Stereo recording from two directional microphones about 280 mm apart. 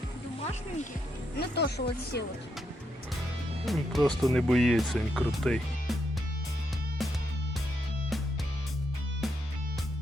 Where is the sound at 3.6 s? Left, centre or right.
Centre.